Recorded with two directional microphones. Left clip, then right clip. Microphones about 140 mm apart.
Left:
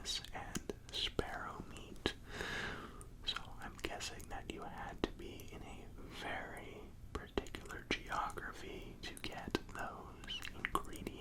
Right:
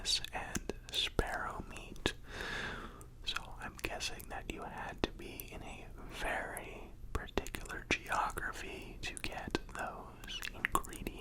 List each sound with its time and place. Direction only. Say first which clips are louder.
0.0 s whispering: right 7 dB; 50° right (ahead or behind)
2.3 s whispering: right 2 dB; 25° right (ahead or behind); by 5.7 s 45° right (ahead or behind)
6.2 s whispering: right 6 dB; 55° right (ahead or behind)
9.3 s whispering: right 2 dB; 30° right (ahead or behind)